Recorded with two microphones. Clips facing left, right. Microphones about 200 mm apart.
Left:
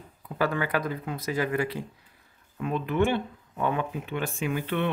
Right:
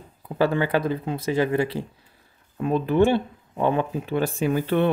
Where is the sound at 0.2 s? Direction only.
30° right (ahead or behind).